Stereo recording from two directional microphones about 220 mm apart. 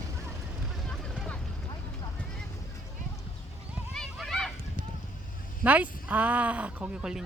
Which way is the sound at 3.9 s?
Centre (ahead or behind).